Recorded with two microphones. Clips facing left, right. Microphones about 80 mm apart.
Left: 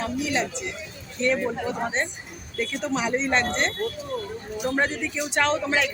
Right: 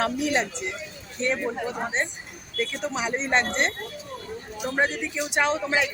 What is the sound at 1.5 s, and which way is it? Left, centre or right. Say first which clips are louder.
A man's voice: left 1 dB; centre.